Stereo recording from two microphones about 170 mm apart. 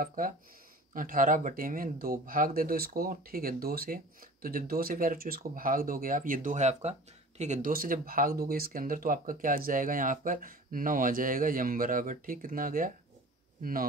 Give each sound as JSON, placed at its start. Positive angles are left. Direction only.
{"t": 0.0, "sound": "speech", "side_deg": -55}